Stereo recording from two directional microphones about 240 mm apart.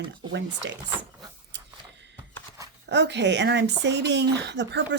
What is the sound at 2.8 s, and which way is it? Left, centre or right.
Speech, right.